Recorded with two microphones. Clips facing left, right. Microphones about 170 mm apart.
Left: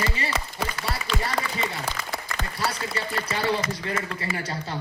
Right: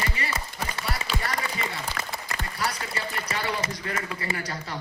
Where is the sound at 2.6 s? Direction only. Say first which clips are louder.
Left 1 dB; 25° left (ahead or behind).